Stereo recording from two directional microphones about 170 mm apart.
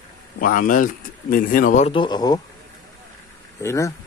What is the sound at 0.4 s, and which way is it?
Speech, 55° left (ahead or behind).